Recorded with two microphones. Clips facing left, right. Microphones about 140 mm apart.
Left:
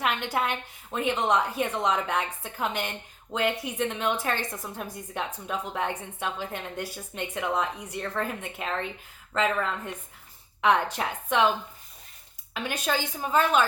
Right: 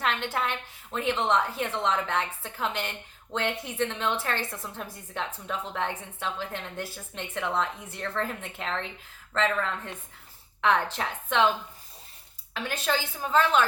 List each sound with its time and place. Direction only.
0.0 s a woman's voice: 15° left (ahead or behind)
12.5 s a woman's voice: 15° left (ahead or behind)